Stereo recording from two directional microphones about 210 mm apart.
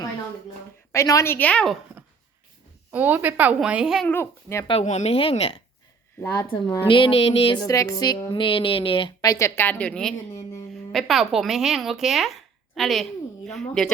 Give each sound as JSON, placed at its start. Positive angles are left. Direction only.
{"t": 0.9, "sound": "a woman's voice", "side_deg": 15}
{"t": 2.9, "sound": "a woman's voice", "side_deg": -10}
{"t": 4.1, "sound": "a woman's voice", "side_deg": 10}
{"t": 4.7, "sound": "a sound", "side_deg": 30}
{"t": 6.8, "sound": "a sound", "side_deg": 25}
{"t": 10.9, "sound": "speech", "side_deg": 0}